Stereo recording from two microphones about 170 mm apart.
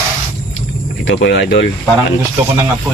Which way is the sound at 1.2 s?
90° left.